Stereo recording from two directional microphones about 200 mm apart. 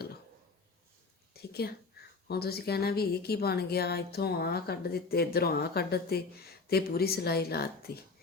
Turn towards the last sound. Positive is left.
turn(degrees=55)  # may be behind; listen again after turning